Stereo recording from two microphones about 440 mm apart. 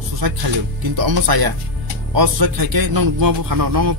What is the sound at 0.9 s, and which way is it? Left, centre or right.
A man's voice, right.